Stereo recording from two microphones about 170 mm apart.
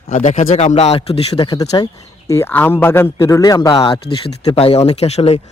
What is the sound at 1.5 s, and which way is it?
A man's voice, 25° left (ahead or behind).